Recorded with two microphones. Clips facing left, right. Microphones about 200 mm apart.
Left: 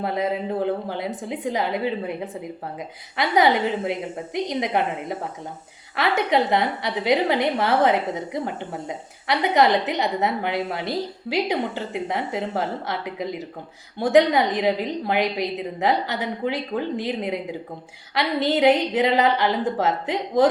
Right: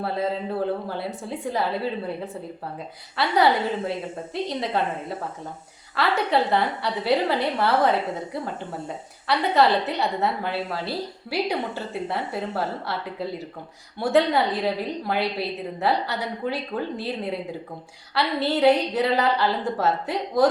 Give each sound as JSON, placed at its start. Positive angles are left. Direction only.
{"t": 0.0, "sound": "a woman's voice", "side_deg": 15}